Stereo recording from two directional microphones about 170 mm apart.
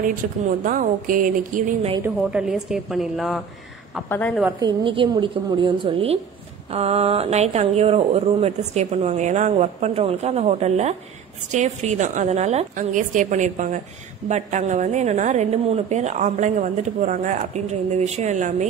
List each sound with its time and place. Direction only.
0.0 s a woman's voice: 50° right (ahead or behind)
2.0 s a woman's voice: 5° right (ahead or behind)
4.6 s a woman's voice: 30° right (ahead or behind)